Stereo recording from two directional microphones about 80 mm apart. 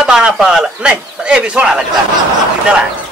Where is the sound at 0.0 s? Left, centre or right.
Centre.